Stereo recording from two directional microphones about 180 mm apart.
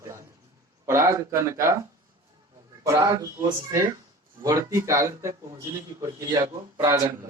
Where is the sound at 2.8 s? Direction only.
20° right (ahead or behind).